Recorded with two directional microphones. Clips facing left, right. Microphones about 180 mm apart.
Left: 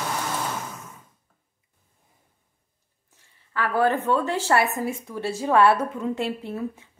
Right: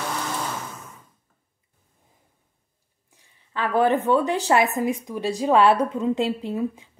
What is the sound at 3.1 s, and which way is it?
A woman's voice, 20° right (ahead or behind).